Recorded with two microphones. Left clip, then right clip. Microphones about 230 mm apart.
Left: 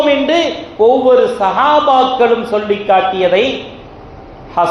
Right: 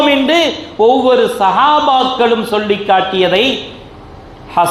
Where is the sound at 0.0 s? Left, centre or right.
Right.